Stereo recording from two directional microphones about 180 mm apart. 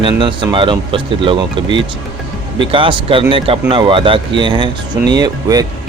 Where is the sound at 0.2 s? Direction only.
25° right (ahead or behind).